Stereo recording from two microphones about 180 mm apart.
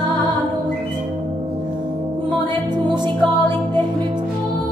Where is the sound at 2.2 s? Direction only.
25° right (ahead or behind).